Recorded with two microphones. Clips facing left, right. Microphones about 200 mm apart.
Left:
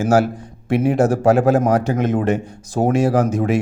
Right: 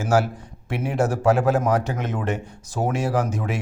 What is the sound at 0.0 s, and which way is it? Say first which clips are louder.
Speech: left 5 dB; 45° left (ahead or behind).